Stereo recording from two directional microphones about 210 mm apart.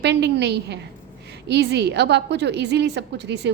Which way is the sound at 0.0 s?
55° right (ahead or behind).